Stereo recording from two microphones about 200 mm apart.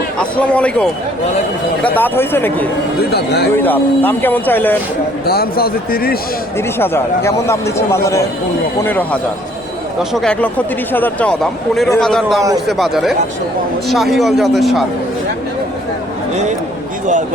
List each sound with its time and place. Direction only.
0.2 s a man's voice: 5° left (ahead or behind)
3.0 s speech: 55° left (ahead or behind)
3.5 s a man's voice: 10° left (ahead or behind)
5.2 s a man's voice: 50° left (ahead or behind)
6.6 s a man's voice: 10° left (ahead or behind)
10.0 s speech: centre (ahead or behind)
16.3 s speech: 35° right (ahead or behind)